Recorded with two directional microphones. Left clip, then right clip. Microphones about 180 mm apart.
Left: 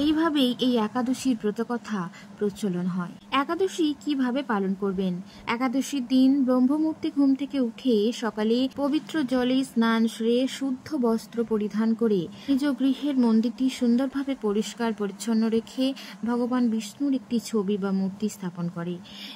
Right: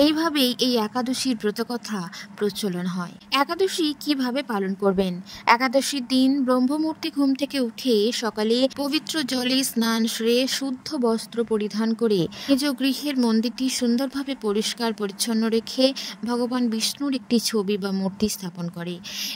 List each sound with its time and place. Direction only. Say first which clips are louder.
0.0 s speech: right 3 dB; 55° right (ahead or behind)
7.0 s speech: right 1 dB; 50° right (ahead or behind)